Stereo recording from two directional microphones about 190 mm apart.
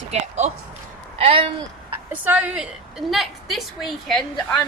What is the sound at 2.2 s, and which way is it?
A woman's voice, 5° right (ahead or behind).